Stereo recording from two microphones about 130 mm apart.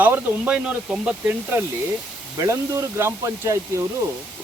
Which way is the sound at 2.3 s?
25° right (ahead or behind).